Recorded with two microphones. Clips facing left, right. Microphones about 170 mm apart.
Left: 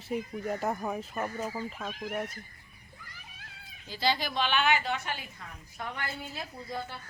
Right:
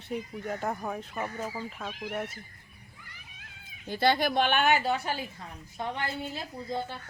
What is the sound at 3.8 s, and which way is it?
A woman's voice, 55° right (ahead or behind).